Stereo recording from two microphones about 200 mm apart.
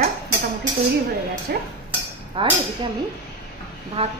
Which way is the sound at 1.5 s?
50° right (ahead or behind).